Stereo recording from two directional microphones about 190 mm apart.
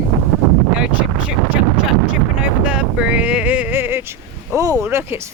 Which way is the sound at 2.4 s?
5° right (ahead or behind).